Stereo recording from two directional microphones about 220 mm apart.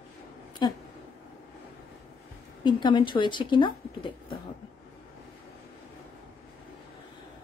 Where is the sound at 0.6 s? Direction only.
20° left (ahead or behind).